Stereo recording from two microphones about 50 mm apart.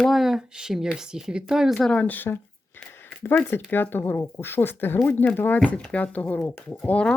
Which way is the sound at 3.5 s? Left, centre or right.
Left.